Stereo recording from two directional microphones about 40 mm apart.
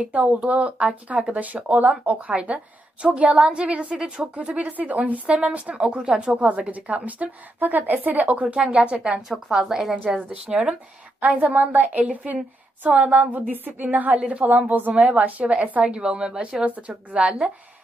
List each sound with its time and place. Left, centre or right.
0.0 s a woman's voice: right
5.3 s a woman's voice: right
6.7 s a woman's voice: right; by 9.9 s centre
10.1 s a woman's voice: right
11.1 s a woman's voice: right
16.6 s speech: right